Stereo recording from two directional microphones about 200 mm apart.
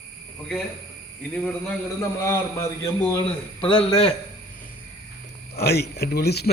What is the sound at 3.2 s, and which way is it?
Speech, 30° left (ahead or behind).